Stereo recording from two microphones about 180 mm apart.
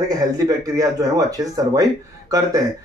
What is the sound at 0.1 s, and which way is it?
Speech, 20° right (ahead or behind).